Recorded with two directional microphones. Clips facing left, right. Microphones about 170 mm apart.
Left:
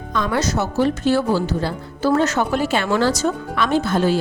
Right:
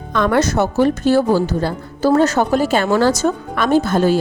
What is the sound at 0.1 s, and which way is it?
A woman's voice, 60° right (ahead or behind).